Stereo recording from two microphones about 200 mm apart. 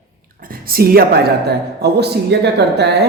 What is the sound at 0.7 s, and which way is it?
A man's voice, 50° right (ahead or behind).